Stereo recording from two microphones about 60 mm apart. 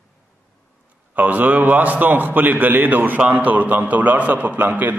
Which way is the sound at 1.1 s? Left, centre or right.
Right.